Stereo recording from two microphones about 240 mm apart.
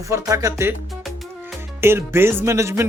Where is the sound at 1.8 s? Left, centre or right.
Centre.